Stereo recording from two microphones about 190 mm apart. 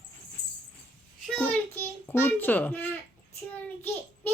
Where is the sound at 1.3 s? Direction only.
5° left (ahead or behind).